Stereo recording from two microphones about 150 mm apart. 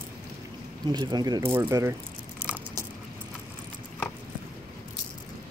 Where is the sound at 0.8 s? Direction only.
30° right (ahead or behind).